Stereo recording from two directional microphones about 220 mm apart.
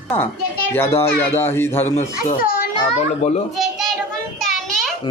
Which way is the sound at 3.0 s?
30° left (ahead or behind).